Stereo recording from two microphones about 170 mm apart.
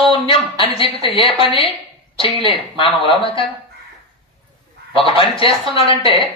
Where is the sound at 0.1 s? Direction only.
30° left (ahead or behind).